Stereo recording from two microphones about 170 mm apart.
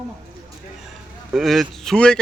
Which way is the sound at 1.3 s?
Centre (ahead or behind).